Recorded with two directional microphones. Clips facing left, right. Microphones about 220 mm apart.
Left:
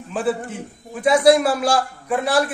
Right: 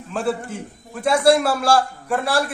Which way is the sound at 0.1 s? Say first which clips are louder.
Left 1 dB; centre (ahead or behind).